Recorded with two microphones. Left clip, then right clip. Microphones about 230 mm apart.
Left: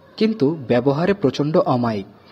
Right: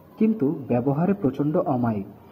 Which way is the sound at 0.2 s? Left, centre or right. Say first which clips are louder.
Left 5 dB; left.